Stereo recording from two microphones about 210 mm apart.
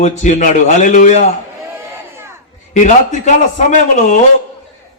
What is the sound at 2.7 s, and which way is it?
A man's voice, 35° left (ahead or behind).